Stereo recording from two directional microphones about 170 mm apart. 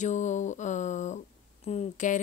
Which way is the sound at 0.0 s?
45° left (ahead or behind).